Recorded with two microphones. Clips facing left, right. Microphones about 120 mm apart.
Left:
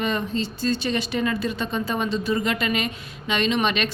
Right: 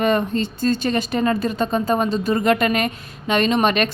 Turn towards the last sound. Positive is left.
turn(degrees=-45)  # may be behind; listen again after turning